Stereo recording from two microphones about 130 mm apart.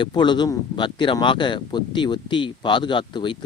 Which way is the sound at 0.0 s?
35° left (ahead or behind).